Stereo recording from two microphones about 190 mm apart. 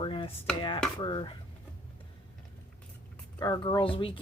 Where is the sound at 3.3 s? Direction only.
20° left (ahead or behind).